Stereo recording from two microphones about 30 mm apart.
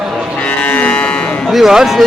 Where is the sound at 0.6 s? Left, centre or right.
Left.